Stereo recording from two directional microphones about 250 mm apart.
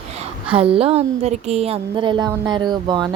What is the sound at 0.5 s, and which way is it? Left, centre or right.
A woman's voice, right.